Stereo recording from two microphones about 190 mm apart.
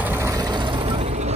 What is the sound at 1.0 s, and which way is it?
Vehicle, 35° right (ahead or behind).